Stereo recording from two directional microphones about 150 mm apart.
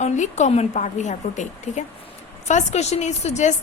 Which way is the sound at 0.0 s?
50° left (ahead or behind).